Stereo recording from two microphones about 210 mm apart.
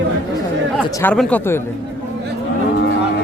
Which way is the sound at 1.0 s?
10° left (ahead or behind).